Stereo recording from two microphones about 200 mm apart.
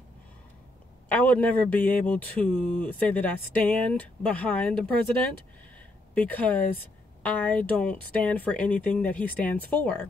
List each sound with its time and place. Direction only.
1.0 s speech: 10° left (ahead or behind)